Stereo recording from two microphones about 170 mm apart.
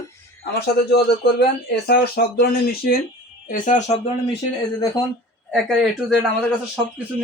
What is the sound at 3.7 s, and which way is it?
Speech, 45° left (ahead or behind).